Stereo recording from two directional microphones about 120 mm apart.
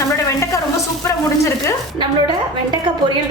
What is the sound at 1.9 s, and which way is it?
Speech, 40° right (ahead or behind).